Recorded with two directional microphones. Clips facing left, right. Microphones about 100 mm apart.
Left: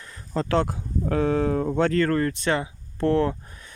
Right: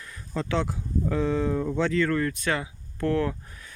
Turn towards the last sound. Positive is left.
turn(degrees=25)  # may be behind; listen again after turning